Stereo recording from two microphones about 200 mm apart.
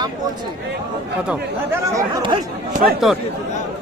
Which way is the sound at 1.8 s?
15° right (ahead or behind).